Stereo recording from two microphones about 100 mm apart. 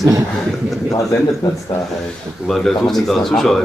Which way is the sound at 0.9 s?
30° left (ahead or behind).